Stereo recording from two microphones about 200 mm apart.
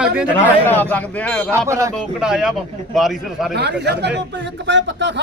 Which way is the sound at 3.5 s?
55° right (ahead or behind).